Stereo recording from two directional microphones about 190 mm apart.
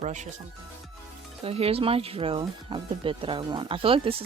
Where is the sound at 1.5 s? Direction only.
30° right (ahead or behind).